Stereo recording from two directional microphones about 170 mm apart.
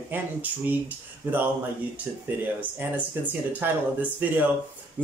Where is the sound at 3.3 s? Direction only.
10° right (ahead or behind).